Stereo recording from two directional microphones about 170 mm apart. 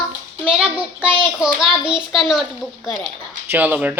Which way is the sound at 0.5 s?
5° right (ahead or behind).